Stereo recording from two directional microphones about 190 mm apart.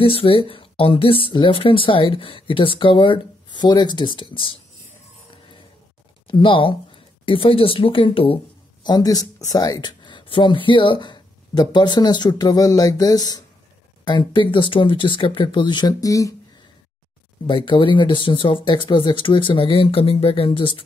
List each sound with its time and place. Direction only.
0.0 s speech: 30° left (ahead or behind)
6.2 s speech: 25° left (ahead or behind)
17.5 s speech: 25° left (ahead or behind)